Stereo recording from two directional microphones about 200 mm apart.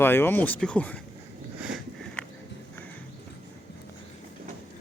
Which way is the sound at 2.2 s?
5° left (ahead or behind).